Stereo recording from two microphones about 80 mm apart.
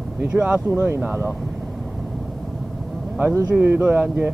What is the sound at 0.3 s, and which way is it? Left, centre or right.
Speech, centre.